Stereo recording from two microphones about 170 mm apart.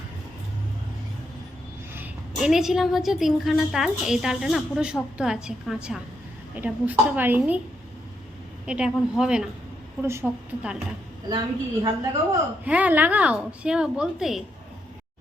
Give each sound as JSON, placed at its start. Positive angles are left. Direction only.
{"t": 2.0, "sound": "a woman's voice", "side_deg": -5}
{"t": 8.6, "sound": "a woman's voice", "side_deg": -5}
{"t": 11.3, "sound": "a woman's voice", "side_deg": -25}
{"t": 12.6, "sound": "a woman's voice", "side_deg": -10}